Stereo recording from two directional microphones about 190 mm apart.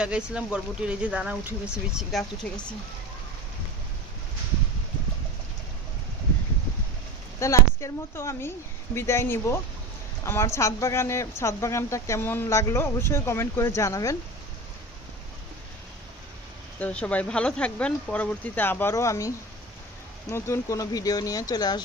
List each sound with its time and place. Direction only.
0.0 s speech: 5° right (ahead or behind)
7.3 s speech: 15° left (ahead or behind)
16.8 s speech: 5° left (ahead or behind)
20.3 s speech: 15° left (ahead or behind)